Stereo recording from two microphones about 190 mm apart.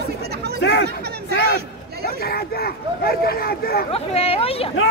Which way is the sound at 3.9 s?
30° left (ahead or behind).